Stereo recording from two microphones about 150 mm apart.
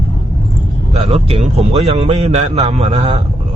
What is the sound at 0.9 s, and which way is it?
A man's voice, 45° right (ahead or behind).